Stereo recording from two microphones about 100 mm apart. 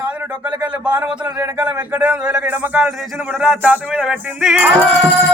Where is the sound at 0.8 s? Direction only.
15° right (ahead or behind).